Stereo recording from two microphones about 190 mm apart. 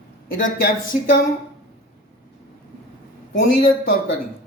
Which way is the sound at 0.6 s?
50° left (ahead or behind).